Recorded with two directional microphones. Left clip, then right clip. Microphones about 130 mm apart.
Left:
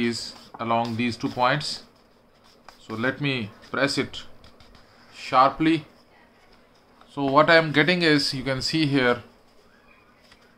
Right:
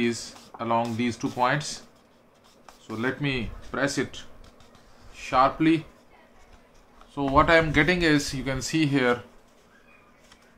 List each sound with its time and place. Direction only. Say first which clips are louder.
0.0 s speech: left 1 dB; 20° left (ahead or behind)
3.0 s speech: left 2 dB; 25° left (ahead or behind)
7.2 s speech: left 2 dB; 20° left (ahead or behind)